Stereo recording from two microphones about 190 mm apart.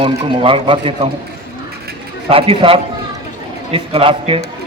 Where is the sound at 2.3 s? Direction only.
30° right (ahead or behind).